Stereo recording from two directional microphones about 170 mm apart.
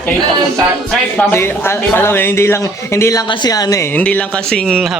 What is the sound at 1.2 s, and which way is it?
Speech, 15° left (ahead or behind).